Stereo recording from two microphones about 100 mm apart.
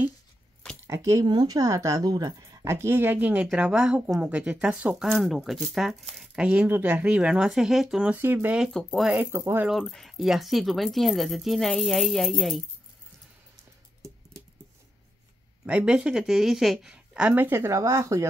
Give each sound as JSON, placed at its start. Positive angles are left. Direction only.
{"t": 0.8, "sound": "speech", "side_deg": -30}
{"t": 1.2, "sound": "speech", "side_deg": -45}
{"t": 5.0, "sound": "speech", "side_deg": 0}
{"t": 8.2, "sound": "speech", "side_deg": -20}
{"t": 8.7, "sound": "speech", "side_deg": 0}
{"t": 9.1, "sound": "speech", "side_deg": -25}
{"t": 9.7, "sound": "speech", "side_deg": 0}
{"t": 15.6, "sound": "speech", "side_deg": -10}
{"t": 17.7, "sound": "speech", "side_deg": -30}